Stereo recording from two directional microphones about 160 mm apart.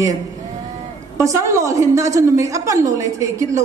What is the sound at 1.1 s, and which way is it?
Speech, 20° right (ahead or behind).